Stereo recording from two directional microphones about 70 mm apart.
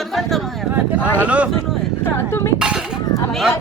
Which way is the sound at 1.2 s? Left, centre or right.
Centre.